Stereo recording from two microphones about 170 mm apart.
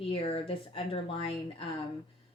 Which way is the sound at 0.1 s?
30° left (ahead or behind).